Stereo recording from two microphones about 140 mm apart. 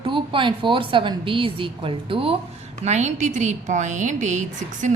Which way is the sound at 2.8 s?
55° right (ahead or behind).